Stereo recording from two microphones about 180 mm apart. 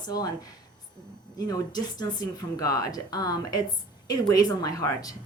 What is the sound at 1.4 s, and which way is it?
A woman's voice, 20° left (ahead or behind).